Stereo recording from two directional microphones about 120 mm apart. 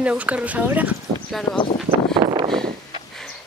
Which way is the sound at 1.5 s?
40° left (ahead or behind).